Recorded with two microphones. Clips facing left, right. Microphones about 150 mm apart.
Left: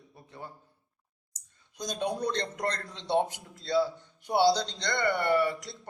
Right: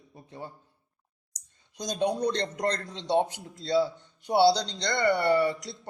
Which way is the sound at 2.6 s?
35° right (ahead or behind).